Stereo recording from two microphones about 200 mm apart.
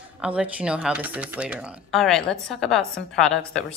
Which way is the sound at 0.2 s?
5° right (ahead or behind).